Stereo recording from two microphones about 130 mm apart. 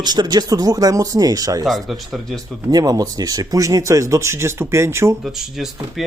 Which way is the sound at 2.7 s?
30° right (ahead or behind).